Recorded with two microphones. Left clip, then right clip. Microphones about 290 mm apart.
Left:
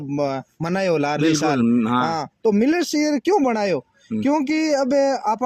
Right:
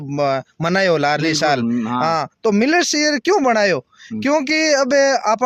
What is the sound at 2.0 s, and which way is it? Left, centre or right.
Speech, right.